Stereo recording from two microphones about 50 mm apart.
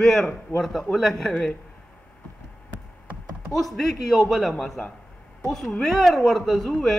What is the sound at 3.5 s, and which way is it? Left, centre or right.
A woman's voice, centre.